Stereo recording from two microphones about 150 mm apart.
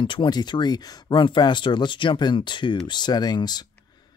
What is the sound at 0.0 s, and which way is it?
Speech, 30° left (ahead or behind).